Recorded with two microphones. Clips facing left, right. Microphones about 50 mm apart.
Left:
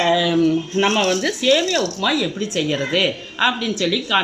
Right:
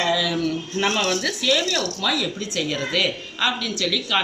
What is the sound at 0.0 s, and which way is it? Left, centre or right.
Speech, left.